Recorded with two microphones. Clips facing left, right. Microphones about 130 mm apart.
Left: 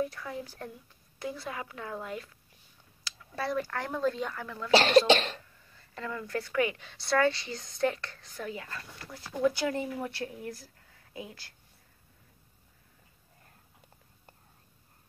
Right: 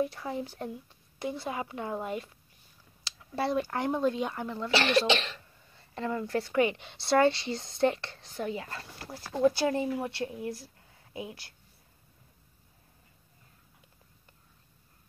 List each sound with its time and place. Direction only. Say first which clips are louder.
0.0 s a woman's voice: right 3 dB; 25° right (ahead or behind)
5.1 s cough: left 4 dB; 45° left (ahead or behind)
5.7 s a woman's voice: right 5 dB; 25° right (ahead or behind)